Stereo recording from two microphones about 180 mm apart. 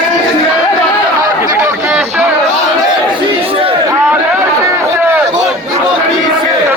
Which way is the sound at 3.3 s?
30° right (ahead or behind).